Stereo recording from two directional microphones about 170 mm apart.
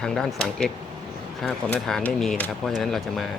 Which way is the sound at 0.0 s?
5° left (ahead or behind).